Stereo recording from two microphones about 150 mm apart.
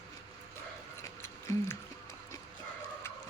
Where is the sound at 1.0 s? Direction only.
20° left (ahead or behind).